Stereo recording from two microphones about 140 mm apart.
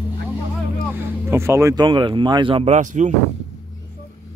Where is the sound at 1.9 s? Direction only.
35° right (ahead or behind).